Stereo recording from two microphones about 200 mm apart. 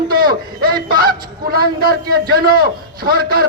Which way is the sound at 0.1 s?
50° right (ahead or behind).